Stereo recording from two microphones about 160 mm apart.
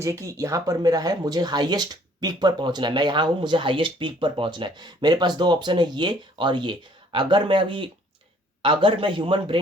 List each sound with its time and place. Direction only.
0.0 s a man's voice: 20° right (ahead or behind)